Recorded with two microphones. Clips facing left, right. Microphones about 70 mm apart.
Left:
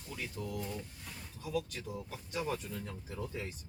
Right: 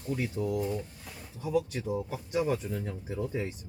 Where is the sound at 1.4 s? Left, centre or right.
Right.